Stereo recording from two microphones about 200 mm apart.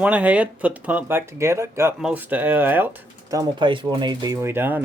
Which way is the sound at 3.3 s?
20° right (ahead or behind).